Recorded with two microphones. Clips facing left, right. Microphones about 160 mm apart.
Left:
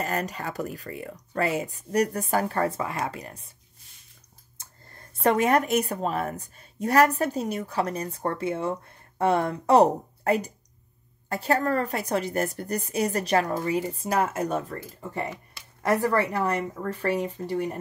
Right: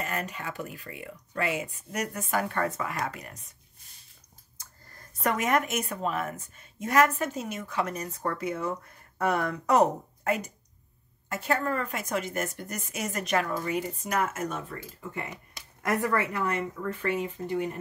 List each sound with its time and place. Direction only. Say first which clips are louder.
0.0 s a woman's voice: left 4 dB; 40° left (ahead or behind)
4.6 s a woman's voice: left 2 dB; 30° left (ahead or behind)